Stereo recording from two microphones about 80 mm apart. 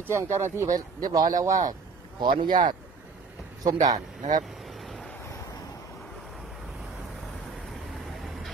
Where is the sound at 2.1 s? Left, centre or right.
Right.